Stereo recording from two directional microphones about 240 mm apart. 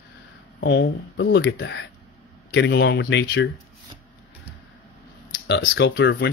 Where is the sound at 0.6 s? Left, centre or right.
Left.